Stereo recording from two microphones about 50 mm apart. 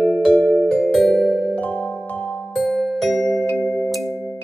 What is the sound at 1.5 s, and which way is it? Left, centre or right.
Music, left.